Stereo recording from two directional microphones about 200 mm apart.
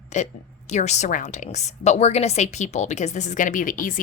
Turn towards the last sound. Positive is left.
turn(degrees=45)  # may be behind; listen again after turning